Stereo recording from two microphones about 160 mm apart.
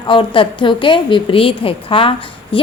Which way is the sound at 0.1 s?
30° left (ahead or behind).